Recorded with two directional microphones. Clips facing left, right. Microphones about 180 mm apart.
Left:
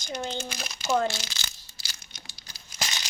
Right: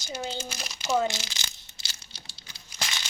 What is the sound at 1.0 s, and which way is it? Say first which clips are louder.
Crumpling: even; 20° right (ahead or behind).